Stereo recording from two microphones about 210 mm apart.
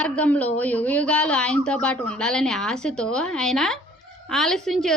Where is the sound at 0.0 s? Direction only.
5° left (ahead or behind).